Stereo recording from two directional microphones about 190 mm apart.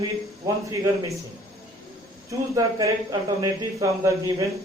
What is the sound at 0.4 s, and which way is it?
Speech, 15° right (ahead or behind).